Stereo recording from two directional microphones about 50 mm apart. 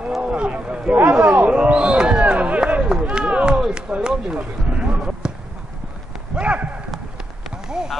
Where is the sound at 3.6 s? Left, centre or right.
Centre.